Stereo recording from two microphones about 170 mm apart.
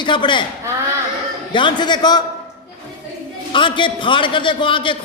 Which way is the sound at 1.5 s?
30° left (ahead or behind).